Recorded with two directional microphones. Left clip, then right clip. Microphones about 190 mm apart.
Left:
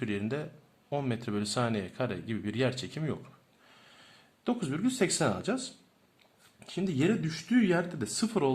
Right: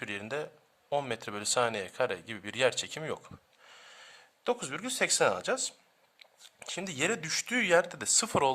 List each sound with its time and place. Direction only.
0.0 s speech: 30° right (ahead or behind)